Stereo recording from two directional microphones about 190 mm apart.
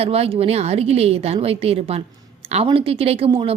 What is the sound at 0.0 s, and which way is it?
A woman's voice, 30° right (ahead or behind).